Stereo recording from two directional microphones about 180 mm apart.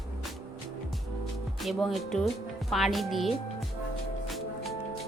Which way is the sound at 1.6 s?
Centre (ahead or behind).